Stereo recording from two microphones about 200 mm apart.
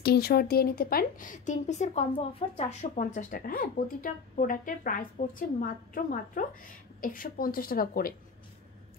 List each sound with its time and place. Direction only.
0.0 s speech: 50° left (ahead or behind)